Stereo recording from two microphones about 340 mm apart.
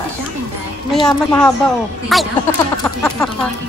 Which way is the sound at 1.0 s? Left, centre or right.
Centre.